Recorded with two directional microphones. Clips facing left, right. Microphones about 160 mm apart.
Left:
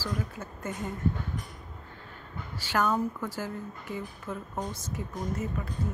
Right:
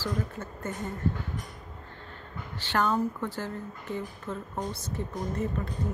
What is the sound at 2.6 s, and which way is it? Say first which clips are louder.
Speech: right 1 dB; 10° left (ahead or behind).